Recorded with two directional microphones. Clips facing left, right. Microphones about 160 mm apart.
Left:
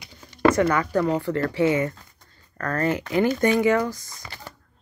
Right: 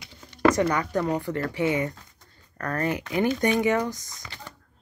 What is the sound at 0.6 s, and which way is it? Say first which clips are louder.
Speech: left 3 dB; 20° right (ahead or behind).